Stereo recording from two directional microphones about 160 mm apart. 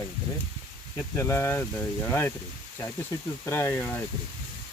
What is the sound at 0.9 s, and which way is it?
Speech, 15° left (ahead or behind).